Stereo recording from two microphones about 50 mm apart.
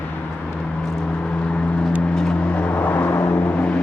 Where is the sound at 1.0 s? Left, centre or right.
Left.